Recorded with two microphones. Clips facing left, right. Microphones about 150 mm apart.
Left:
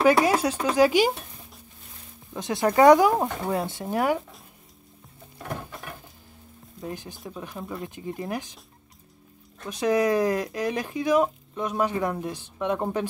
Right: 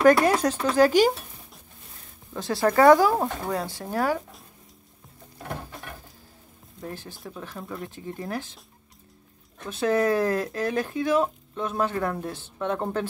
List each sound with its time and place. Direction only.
0.0 s speech: 10° left (ahead or behind)
2.3 s speech: 20° left (ahead or behind)
6.8 s speech: 15° left (ahead or behind)
9.7 s speech: 15° left (ahead or behind)